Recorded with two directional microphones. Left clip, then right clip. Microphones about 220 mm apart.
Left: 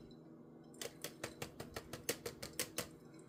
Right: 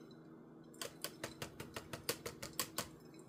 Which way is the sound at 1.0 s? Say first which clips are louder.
Right 1 dB; centre (ahead or behind).